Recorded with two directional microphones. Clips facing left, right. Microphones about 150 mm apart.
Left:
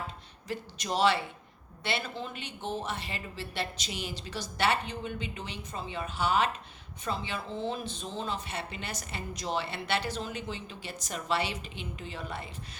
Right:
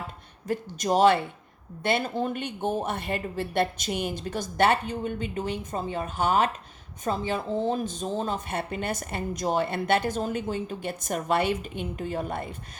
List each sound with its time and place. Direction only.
0.4 s speech: 45° right (ahead or behind)